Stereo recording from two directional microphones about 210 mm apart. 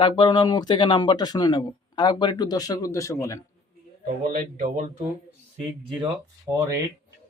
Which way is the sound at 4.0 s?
40° right (ahead or behind).